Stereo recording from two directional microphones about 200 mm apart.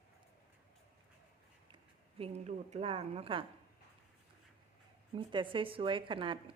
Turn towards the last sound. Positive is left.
turn(degrees=-25)  # may be behind; listen again after turning